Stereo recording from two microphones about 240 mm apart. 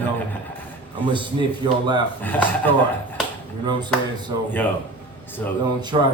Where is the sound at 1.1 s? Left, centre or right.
Centre.